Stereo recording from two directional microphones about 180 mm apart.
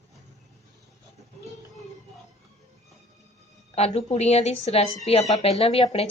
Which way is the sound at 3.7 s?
40° left (ahead or behind).